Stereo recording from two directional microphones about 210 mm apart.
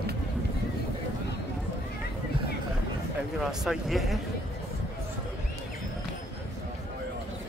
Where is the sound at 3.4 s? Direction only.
Centre (ahead or behind).